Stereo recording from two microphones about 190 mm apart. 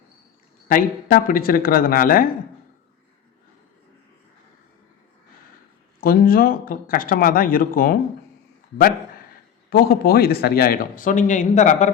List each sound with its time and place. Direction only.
0.7 s speech: 50° left (ahead or behind)
6.0 s speech: 50° left (ahead or behind)
9.6 s speech: 55° left (ahead or behind)